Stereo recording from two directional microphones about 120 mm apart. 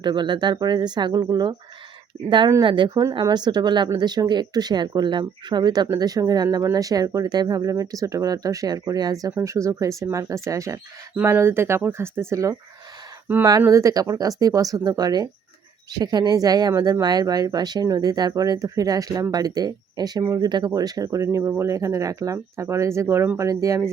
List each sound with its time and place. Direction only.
0.0 s speech: 40° right (ahead or behind)
2.6 s speech: 40° right (ahead or behind)